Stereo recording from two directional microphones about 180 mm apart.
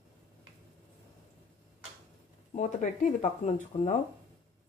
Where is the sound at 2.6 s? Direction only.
40° left (ahead or behind).